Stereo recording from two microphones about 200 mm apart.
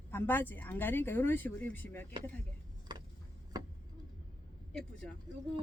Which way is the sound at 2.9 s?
20° right (ahead or behind).